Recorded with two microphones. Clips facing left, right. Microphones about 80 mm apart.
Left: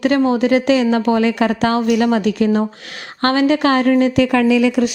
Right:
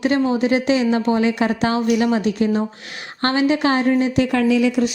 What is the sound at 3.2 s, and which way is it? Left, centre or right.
Speech, left.